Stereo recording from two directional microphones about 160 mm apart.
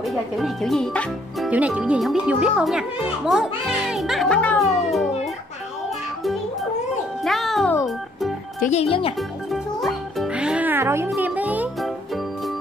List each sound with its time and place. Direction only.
0.0 s speech: centre (ahead or behind)
1.5 s speech: 10° right (ahead or behind)
7.2 s music: centre (ahead or behind)
8.5 s speech: 45° left (ahead or behind)
9.5 s music: centre (ahead or behind); by 11.1 s 15° right (ahead or behind)
11.1 s a child's voice: 10° right (ahead or behind)